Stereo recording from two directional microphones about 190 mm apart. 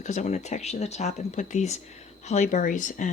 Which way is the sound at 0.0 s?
35° left (ahead or behind).